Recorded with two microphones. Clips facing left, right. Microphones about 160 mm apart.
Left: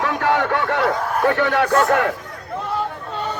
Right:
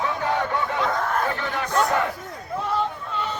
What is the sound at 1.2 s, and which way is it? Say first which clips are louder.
Speech: left 9 dB; 70° left (ahead or behind).